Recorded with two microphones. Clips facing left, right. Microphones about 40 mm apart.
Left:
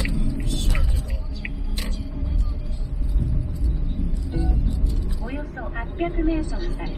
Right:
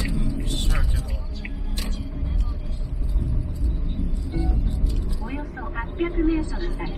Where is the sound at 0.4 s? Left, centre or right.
Right.